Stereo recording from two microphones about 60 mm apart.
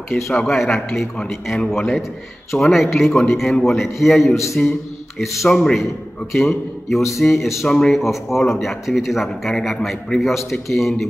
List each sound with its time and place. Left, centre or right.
0.1 s speech: centre
1.7 s a man's voice: centre
4.6 s speech: centre
5.2 s a man's voice: centre
7.6 s speech: centre
7.9 s a man's voice: centre